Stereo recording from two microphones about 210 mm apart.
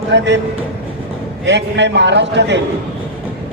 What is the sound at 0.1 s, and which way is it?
Speech, 60° right (ahead or behind).